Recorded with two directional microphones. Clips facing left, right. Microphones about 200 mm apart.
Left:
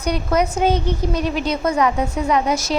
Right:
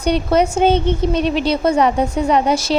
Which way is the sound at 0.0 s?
30° right (ahead or behind).